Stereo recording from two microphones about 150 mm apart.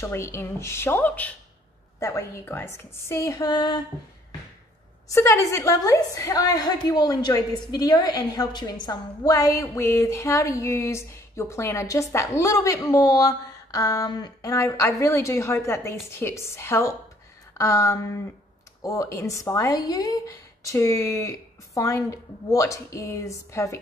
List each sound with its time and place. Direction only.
0.0 s a woman's voice: 15° left (ahead or behind)
5.0 s a woman's voice: 20° left (ahead or behind)